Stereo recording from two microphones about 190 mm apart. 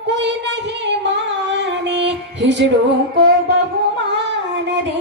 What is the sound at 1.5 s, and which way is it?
Female singing, 70° right (ahead or behind).